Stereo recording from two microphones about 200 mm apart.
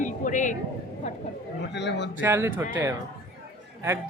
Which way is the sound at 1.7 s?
60° left (ahead or behind).